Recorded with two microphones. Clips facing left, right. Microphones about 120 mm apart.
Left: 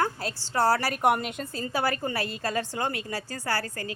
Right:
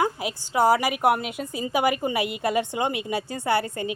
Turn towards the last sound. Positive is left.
turn(degrees=-20)  # may be behind; listen again after turning